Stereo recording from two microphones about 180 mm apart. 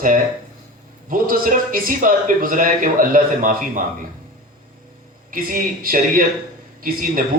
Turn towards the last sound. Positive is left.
turn(degrees=-55)  # may be behind; listen again after turning